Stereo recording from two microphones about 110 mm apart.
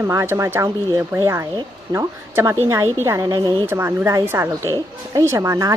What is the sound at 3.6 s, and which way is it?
A woman's voice, 20° right (ahead or behind).